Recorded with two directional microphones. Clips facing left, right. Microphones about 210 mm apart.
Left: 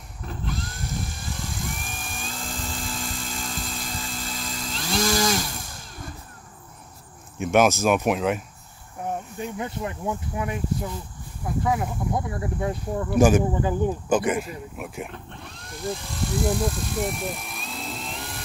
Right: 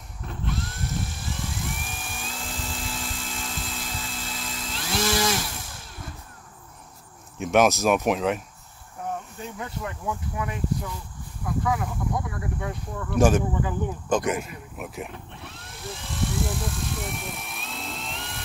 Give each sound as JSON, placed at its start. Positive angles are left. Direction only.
{"t": 0.3, "sound": "helicopter", "side_deg": 0}
{"t": 7.3, "sound": "speech", "side_deg": 0}
{"t": 9.4, "sound": "speech", "side_deg": 20}
{"t": 13.1, "sound": "speech", "side_deg": 10}
{"t": 13.6, "sound": "speech", "side_deg": 30}
{"t": 14.0, "sound": "speech", "side_deg": 5}